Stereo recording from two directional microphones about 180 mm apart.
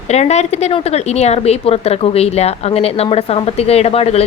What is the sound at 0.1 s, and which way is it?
Speech, 40° left (ahead or behind).